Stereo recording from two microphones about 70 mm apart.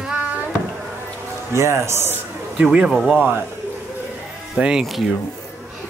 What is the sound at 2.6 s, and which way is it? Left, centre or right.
Speech, centre.